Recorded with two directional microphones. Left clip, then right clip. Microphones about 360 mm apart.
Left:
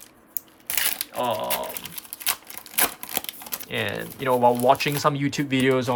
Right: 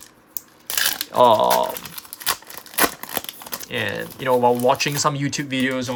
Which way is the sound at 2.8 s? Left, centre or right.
Centre.